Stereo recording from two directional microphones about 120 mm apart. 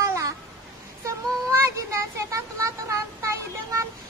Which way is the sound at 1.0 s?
25° right (ahead or behind).